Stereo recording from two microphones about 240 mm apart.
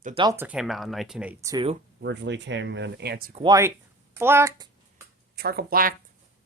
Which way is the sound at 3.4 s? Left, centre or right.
Centre.